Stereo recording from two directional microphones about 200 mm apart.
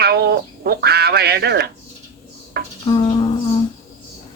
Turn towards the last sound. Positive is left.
turn(degrees=20)  # may be behind; listen again after turning